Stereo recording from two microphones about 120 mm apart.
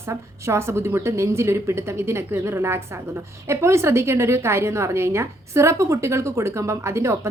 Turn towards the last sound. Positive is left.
turn(degrees=-25)  # may be behind; listen again after turning